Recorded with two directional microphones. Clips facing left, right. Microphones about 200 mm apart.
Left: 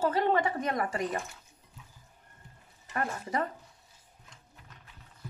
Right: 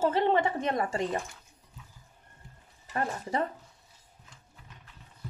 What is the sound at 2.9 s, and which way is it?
Speech, 30° right (ahead or behind).